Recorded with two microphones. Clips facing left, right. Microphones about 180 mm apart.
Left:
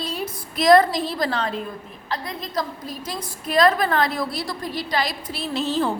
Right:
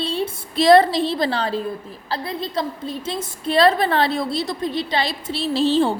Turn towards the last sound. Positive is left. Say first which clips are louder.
# right 5 dB
turn(degrees=-30)  # may be behind; listen again after turning